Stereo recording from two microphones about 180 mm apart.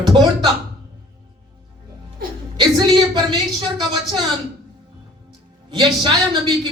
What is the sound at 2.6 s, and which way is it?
Music, 25° right (ahead or behind).